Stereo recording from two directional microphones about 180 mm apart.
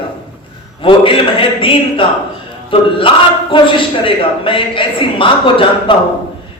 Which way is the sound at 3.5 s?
30° left (ahead or behind).